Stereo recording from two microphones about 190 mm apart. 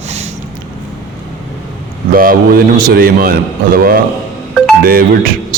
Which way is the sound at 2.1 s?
50° right (ahead or behind).